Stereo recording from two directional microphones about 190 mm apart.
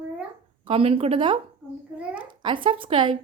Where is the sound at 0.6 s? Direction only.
30° right (ahead or behind).